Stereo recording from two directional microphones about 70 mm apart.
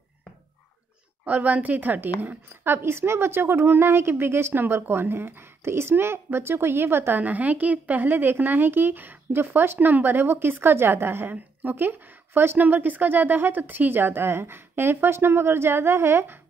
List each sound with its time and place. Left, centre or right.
1.2 s a woman's voice: right